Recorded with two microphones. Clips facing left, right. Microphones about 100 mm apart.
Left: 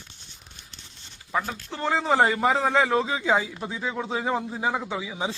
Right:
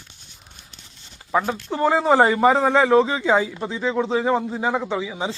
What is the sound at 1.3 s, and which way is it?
Speech, 30° right (ahead or behind).